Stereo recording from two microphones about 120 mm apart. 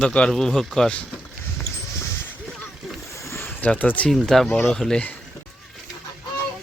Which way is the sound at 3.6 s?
15° left (ahead or behind).